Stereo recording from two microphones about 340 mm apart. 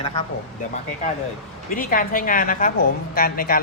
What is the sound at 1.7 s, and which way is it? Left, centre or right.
A woman's voice, left.